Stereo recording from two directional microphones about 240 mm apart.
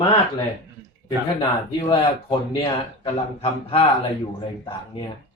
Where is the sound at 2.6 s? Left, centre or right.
Left.